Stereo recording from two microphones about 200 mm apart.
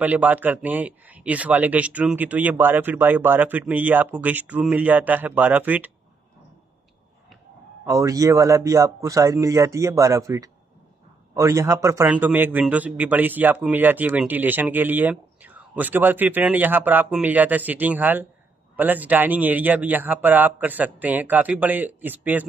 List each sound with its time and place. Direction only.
0.0 s a man's voice: 10° right (ahead or behind)
7.8 s a man's voice: 15° right (ahead or behind)